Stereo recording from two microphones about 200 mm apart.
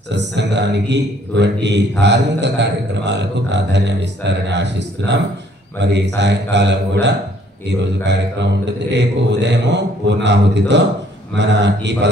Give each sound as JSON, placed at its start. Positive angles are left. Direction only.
{"t": 0.1, "sound": "a man's voice", "side_deg": -60}